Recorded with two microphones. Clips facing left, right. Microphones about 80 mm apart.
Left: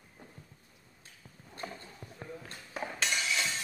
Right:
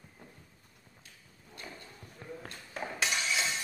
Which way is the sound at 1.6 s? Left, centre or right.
Left.